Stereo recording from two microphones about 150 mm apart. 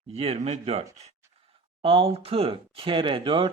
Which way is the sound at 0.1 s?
45° right (ahead or behind).